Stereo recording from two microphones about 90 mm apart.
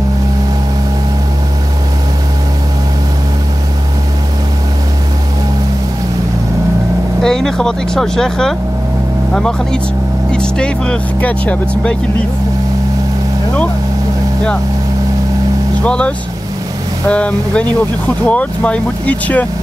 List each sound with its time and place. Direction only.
7.2 s speech: 5° left (ahead or behind)
15.8 s speech: 10° left (ahead or behind)
17.1 s speech: 15° left (ahead or behind)